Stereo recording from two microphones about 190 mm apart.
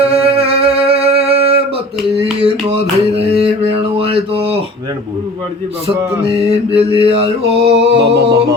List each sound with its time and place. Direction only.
0.0 s music: 30° right (ahead or behind)
3.2 s mantra: 30° right (ahead or behind)
6.2 s mantra: 30° right (ahead or behind)
7.9 s music: 60° right (ahead or behind)